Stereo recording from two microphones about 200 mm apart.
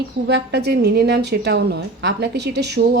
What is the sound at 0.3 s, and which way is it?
A woman's voice, 55° right (ahead or behind).